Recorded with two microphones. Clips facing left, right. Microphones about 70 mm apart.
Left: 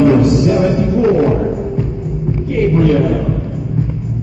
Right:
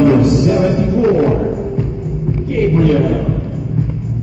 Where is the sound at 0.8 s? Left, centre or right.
Centre.